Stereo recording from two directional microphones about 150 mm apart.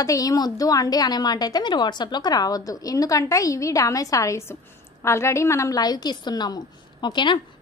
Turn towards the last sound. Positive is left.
turn(degrees=30)  # may be behind; listen again after turning